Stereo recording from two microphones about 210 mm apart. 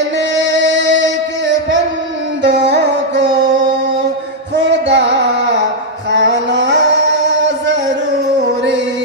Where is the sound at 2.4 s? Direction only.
55° right (ahead or behind).